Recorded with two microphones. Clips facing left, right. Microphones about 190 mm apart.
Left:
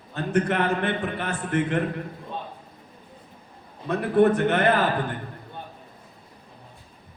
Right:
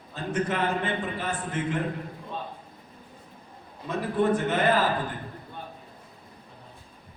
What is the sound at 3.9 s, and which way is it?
Speech, 65° left (ahead or behind).